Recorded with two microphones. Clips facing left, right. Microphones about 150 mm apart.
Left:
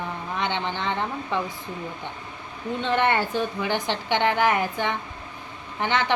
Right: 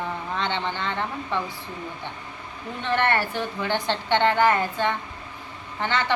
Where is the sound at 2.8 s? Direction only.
15° left (ahead or behind).